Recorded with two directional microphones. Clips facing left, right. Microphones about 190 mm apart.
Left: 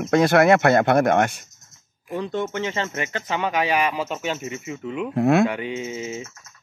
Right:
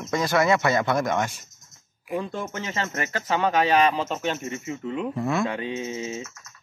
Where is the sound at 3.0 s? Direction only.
35° right (ahead or behind).